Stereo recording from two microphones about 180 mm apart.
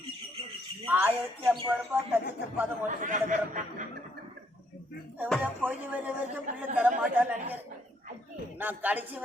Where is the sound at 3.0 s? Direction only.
45° right (ahead or behind).